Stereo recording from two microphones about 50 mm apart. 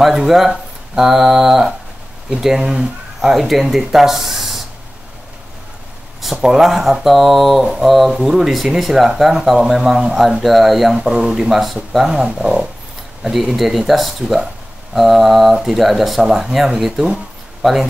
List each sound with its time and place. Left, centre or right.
0.0 s speech: centre
6.2 s speech: centre
10.4 s speech: centre
11.0 s speech: centre
11.5 s speech: centre
12.3 s speech: centre
13.2 s speech: centre